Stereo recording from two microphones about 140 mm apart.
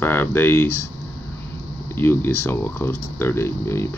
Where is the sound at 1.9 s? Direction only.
15° left (ahead or behind).